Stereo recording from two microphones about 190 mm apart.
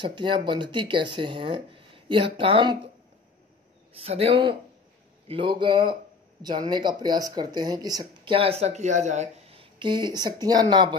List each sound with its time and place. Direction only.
0.0 s speech: 25° right (ahead or behind)
4.0 s speech: 30° right (ahead or behind)